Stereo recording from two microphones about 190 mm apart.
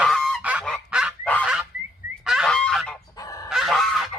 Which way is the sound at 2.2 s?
Centre (ahead or behind).